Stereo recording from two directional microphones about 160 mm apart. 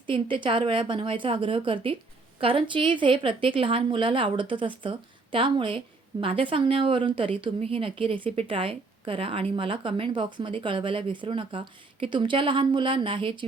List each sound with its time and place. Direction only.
0.1 s a woman's voice: 30° right (ahead or behind)